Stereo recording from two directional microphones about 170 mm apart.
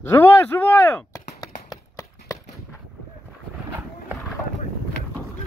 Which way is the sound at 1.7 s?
20° left (ahead or behind).